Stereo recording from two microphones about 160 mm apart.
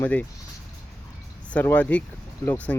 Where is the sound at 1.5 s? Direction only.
10° left (ahead or behind).